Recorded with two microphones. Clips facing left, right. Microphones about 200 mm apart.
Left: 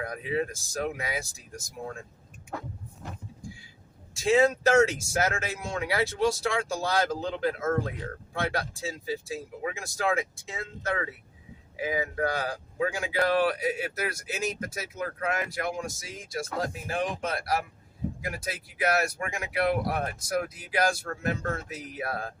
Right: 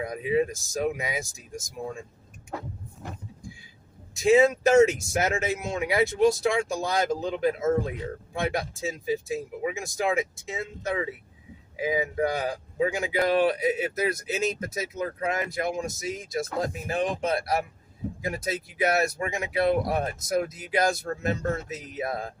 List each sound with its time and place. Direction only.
0.0 s speech: 15° right (ahead or behind)
4.1 s speech: 20° right (ahead or behind)